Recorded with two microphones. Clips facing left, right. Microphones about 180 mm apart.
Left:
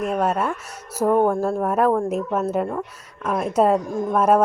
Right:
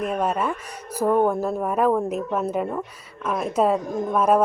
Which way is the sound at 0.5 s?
10° left (ahead or behind).